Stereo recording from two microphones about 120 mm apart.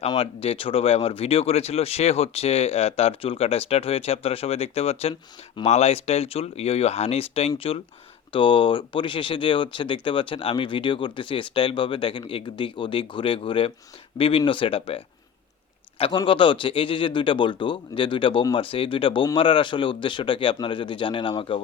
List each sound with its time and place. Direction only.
0.2 s speech: 50° left (ahead or behind)